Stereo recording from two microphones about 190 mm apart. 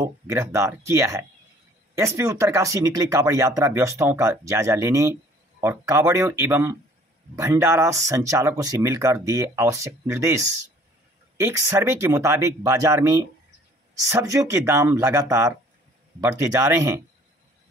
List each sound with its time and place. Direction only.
0.0 s speech: 15° right (ahead or behind)